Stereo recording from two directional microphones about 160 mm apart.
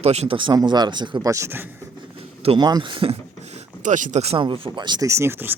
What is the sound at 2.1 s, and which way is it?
Speech, 35° right (ahead or behind).